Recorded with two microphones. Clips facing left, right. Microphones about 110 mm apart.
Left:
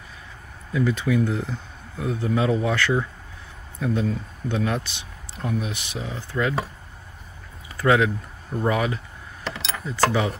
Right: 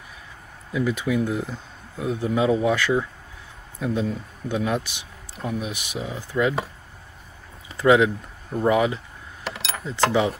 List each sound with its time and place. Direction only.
0.7 s speech: 15° right (ahead or behind)
7.7 s speech: 20° right (ahead or behind)